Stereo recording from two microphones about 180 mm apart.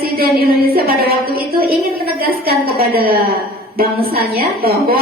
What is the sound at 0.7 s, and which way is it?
A woman's voice, 60° right (ahead or behind).